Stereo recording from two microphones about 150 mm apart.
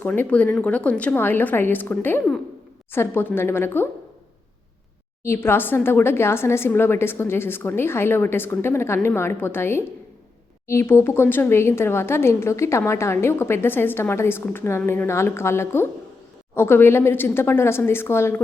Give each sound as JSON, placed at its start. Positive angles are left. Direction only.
{"t": 0.2, "sound": "speech", "side_deg": 10}
{"t": 5.2, "sound": "speech", "side_deg": 15}